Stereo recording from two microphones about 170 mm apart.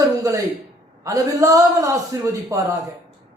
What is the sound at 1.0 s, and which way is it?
A man's voice, 20° right (ahead or behind).